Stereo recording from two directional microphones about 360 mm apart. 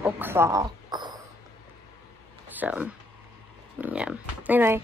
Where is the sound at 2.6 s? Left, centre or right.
Centre.